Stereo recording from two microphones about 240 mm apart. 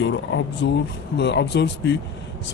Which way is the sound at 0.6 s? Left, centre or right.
Left.